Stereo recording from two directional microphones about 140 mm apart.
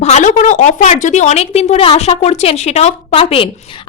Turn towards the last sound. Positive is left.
turn(degrees=40)  # may be behind; listen again after turning